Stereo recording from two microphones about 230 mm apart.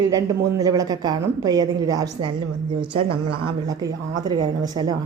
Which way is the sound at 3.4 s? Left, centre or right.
Centre.